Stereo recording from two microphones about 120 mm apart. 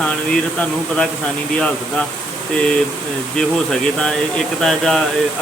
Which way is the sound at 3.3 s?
5° left (ahead or behind).